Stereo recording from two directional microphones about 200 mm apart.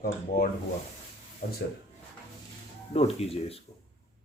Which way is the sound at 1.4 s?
55° left (ahead or behind).